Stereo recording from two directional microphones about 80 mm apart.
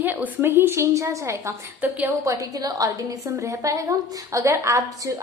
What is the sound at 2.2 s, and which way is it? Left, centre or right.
A woman's voice, right.